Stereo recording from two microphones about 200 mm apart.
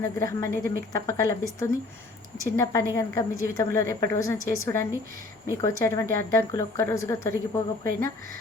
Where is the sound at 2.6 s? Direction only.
15° left (ahead or behind).